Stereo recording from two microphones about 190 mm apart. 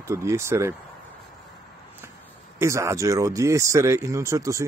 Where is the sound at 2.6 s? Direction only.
15° right (ahead or behind).